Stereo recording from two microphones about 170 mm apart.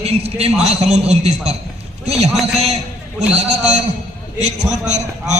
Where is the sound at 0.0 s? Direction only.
35° right (ahead or behind).